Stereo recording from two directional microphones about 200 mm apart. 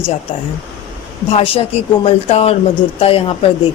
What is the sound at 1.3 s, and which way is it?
Speech, 30° left (ahead or behind).